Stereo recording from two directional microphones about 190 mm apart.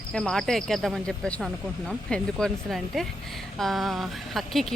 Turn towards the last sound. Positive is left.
turn(degrees=0)  # may be behind; listen again after turning